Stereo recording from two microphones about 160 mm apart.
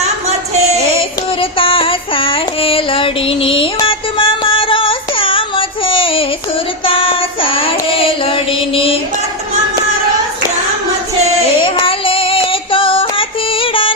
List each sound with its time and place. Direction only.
0.0 s a sound: 40° right (ahead or behind)
1.4 s child singing: 35° left (ahead or behind)
11.6 s child singing: 35° left (ahead or behind)